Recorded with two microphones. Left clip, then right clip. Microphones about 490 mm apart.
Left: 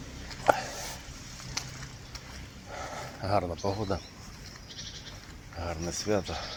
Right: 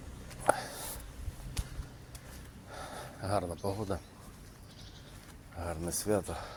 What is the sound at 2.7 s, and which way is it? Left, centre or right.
Dog, right.